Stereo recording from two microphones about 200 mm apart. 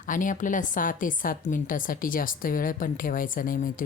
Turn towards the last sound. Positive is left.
turn(degrees=45)  # may be behind; listen again after turning